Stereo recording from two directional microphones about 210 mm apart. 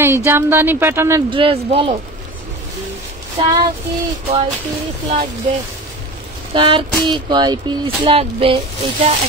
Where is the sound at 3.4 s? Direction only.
25° right (ahead or behind).